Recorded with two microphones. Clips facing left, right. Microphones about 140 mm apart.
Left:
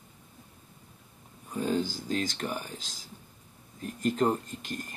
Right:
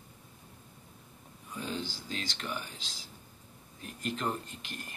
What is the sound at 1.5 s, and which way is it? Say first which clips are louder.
Speech: left 9 dB; 45° left (ahead or behind).